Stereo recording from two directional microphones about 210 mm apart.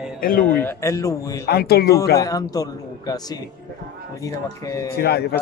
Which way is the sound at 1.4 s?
50° left (ahead or behind).